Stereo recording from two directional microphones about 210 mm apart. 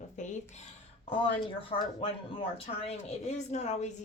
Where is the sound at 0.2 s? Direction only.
35° left (ahead or behind).